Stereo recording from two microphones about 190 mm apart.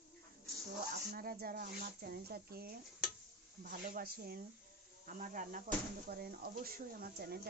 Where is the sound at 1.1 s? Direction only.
50° right (ahead or behind).